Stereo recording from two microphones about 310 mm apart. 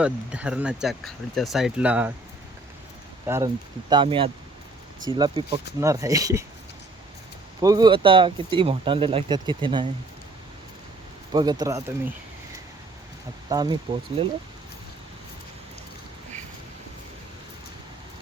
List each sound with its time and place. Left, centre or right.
0.0 s speech: centre
3.2 s speech: centre
7.6 s speech: centre
11.3 s speech: centre
13.5 s speech: centre